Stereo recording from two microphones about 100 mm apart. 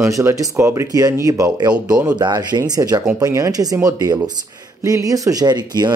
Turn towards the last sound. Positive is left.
turn(degrees=-45)  # may be behind; listen again after turning